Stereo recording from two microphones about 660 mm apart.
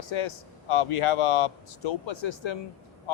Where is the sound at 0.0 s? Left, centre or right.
Left.